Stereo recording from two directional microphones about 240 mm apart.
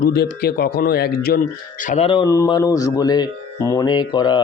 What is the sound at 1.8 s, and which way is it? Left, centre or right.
Speech, left.